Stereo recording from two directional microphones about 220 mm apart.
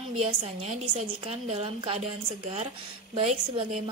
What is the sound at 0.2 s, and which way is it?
A woman's voice, 30° right (ahead or behind).